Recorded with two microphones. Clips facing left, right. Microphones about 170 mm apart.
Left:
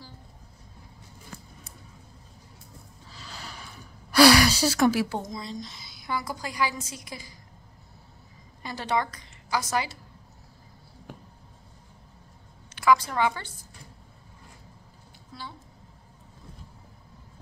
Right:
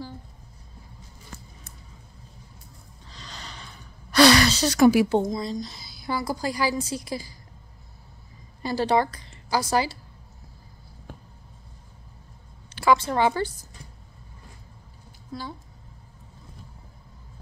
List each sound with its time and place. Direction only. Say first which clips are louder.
3.1 s a sound: even; 5° left (ahead or behind)
4.7 s a woman's voice: right 7 dB; 5° right (ahead or behind)
5.1 s a woman's voice: right 9 dB; 35° right (ahead or behind)
8.6 s a woman's voice: right 6 dB; 35° right (ahead or behind)
12.7 s a woman's voice: right 2 dB; 30° right (ahead or behind)
15.3 s a woman's voice: right 7 dB; 40° right (ahead or behind)